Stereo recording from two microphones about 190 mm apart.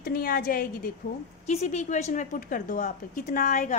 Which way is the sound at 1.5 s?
35° left (ahead or behind).